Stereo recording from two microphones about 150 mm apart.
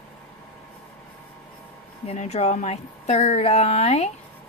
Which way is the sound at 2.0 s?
50° left (ahead or behind).